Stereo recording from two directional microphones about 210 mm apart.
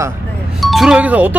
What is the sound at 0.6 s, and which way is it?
Speech, centre (ahead or behind).